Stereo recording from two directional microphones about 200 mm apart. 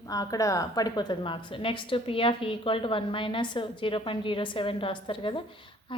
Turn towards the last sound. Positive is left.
turn(degrees=25)  # may be behind; listen again after turning